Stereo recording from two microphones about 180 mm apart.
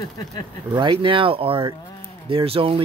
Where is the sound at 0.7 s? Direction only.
25° right (ahead or behind).